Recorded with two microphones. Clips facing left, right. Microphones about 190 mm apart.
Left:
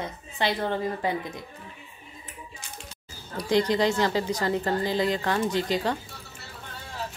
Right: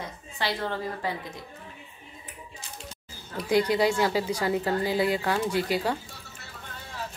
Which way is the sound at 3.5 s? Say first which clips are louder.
Even; 10° right (ahead or behind).